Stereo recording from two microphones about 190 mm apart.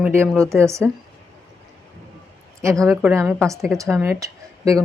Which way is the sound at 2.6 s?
15° right (ahead or behind).